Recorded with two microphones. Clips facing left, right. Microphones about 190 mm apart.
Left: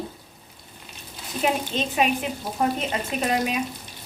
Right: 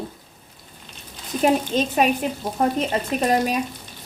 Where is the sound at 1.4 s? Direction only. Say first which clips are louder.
Right 5 dB; 45° right (ahead or behind).